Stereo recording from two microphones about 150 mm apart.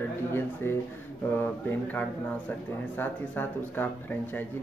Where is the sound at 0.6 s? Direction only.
15° left (ahead or behind).